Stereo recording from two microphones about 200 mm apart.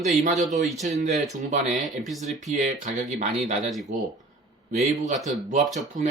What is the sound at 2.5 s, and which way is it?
Speech, 40° right (ahead or behind).